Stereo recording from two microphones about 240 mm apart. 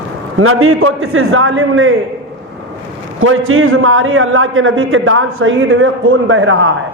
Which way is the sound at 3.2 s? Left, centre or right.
Right.